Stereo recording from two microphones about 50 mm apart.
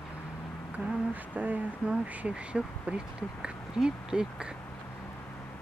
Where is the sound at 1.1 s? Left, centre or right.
Right.